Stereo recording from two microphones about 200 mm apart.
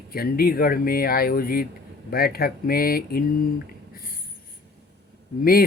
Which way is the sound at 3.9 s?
45° left (ahead or behind).